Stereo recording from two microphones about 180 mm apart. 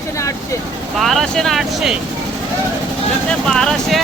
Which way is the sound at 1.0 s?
Centre (ahead or behind).